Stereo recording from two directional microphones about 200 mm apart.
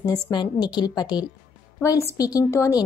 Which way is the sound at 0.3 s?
20° left (ahead or behind).